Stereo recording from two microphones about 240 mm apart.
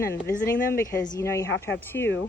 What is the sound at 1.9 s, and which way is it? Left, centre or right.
Speech, left.